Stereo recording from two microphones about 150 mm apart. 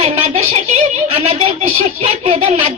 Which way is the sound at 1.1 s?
40° right (ahead or behind).